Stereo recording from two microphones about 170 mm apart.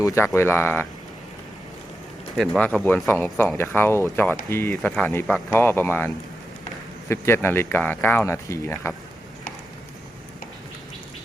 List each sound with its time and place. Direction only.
0.0 s speech: 20° left (ahead or behind)
2.4 s speech: 5° left (ahead or behind)
7.1 s speech: 15° left (ahead or behind)